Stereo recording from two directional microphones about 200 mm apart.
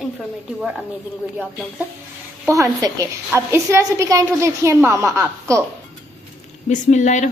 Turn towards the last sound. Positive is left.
turn(degrees=35)  # may be behind; listen again after turning